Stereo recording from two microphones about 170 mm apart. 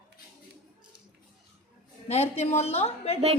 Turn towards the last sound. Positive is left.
turn(degrees=40)  # may be behind; listen again after turning